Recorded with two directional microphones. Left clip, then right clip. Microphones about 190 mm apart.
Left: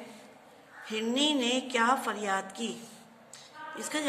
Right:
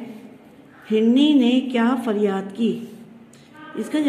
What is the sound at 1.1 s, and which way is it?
A woman's voice, 15° right (ahead or behind).